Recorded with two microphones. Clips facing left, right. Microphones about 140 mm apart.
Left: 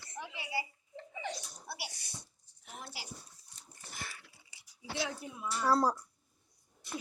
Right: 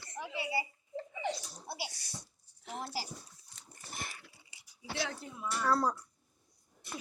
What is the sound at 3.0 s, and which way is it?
Laughter, 40° right (ahead or behind).